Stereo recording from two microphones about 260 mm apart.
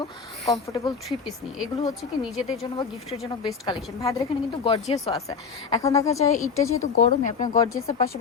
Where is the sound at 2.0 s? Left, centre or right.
Left.